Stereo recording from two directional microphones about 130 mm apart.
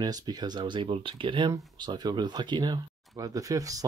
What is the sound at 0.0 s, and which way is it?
Speech, 30° right (ahead or behind).